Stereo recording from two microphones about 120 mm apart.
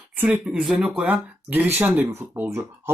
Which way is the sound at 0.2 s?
5° right (ahead or behind).